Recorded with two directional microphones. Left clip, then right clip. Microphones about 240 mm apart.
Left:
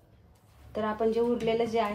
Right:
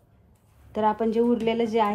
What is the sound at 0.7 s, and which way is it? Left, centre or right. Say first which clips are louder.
A woman's voice: right 5 dB; right.